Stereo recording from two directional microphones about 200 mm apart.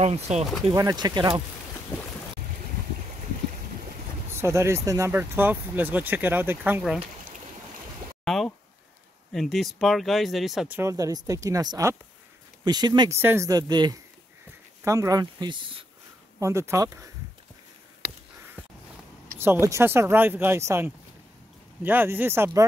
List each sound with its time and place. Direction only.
0.0 s speech: 35° right (ahead or behind)
0.7 s speech: 20° right (ahead or behind)
4.3 s speech: 15° right (ahead or behind)
8.3 s speech: centre (ahead or behind)
10.8 s speech: 15° right (ahead or behind)
19.3 s speech: 10° right (ahead or behind)